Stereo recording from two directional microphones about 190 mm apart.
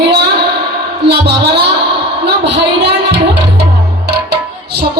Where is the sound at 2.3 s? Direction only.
65° right (ahead or behind).